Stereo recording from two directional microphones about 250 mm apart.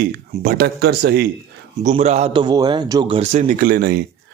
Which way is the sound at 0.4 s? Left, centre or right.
Right.